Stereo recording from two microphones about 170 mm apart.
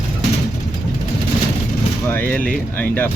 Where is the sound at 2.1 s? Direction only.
10° left (ahead or behind).